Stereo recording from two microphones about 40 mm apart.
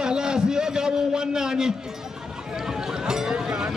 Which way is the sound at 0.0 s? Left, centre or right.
Centre.